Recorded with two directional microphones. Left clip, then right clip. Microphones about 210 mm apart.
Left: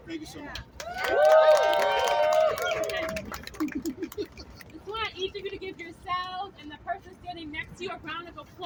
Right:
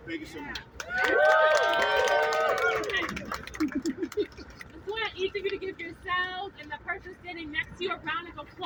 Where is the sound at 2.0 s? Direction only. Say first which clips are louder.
Left 2 dB; 35° left (ahead or behind).